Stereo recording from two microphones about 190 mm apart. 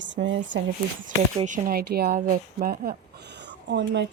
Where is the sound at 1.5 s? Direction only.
45° right (ahead or behind).